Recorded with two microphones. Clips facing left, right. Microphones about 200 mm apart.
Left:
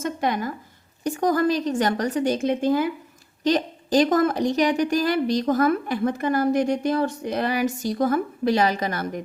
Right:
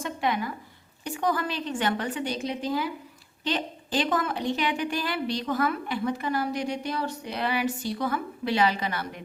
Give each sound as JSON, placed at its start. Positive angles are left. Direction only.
{"t": 0.0, "sound": "a woman's voice", "side_deg": 45}